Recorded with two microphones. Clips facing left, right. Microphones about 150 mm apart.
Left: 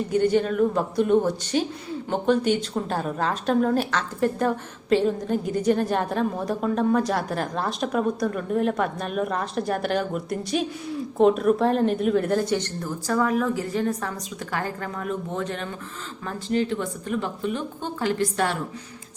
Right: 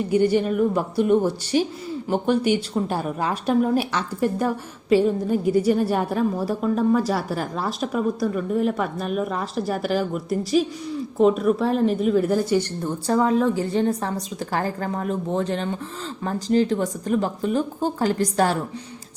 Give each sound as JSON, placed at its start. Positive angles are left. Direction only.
{"t": 0.1, "sound": "speech", "side_deg": -10}
{"t": 12.8, "sound": "a woman's voice", "side_deg": -25}